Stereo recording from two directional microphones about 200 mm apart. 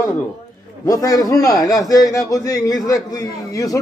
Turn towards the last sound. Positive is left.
turn(degrees=15)  # may be behind; listen again after turning